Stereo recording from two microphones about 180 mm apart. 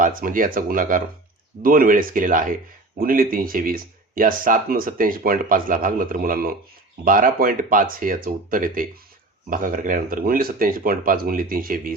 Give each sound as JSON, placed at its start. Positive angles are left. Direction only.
{"t": 0.0, "sound": "speech", "side_deg": -50}